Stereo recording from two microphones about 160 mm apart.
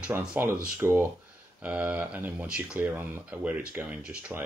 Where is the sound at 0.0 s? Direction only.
5° right (ahead or behind).